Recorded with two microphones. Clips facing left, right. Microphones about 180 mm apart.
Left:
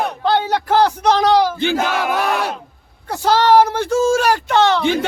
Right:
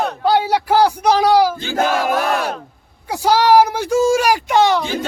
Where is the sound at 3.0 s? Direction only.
10° right (ahead or behind).